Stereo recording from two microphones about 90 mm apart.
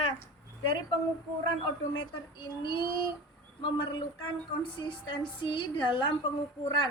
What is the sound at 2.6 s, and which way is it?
A woman's voice, 60° left (ahead or behind).